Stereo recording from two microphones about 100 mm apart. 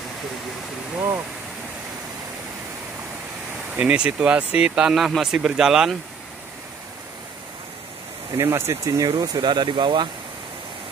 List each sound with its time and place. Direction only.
3.7 s speech: 10° right (ahead or behind)
8.4 s speech: 25° right (ahead or behind)
9.1 s speech: 40° right (ahead or behind)